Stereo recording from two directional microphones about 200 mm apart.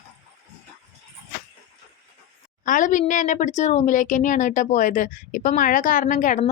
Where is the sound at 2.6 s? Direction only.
40° left (ahead or behind).